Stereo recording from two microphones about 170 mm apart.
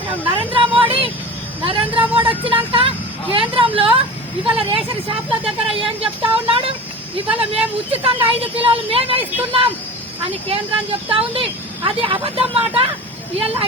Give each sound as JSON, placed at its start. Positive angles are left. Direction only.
{"t": 0.3, "sound": "a sound", "side_deg": -30}
{"t": 1.6, "sound": "speech", "side_deg": -30}
{"t": 11.1, "sound": "speech", "side_deg": -35}